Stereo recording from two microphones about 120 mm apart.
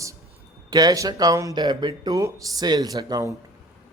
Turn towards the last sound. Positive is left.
turn(degrees=-35)  # may be behind; listen again after turning